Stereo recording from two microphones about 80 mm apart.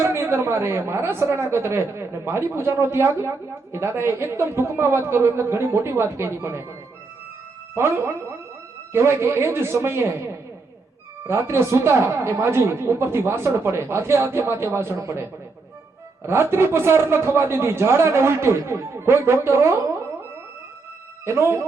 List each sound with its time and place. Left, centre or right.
0.0 s a woman's voice: right
7.8 s a woman's voice: right
11.3 s a woman's voice: right
21.2 s a woman's voice: right